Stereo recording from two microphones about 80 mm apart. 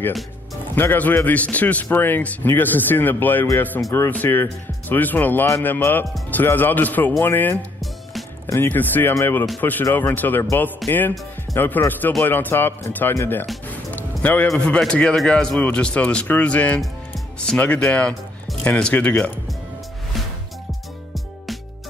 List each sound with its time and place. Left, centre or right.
0.7 s a man's voice: left
7.8 s music: centre
8.5 s a man's voice: left
13.9 s music: left
14.6 s speech: centre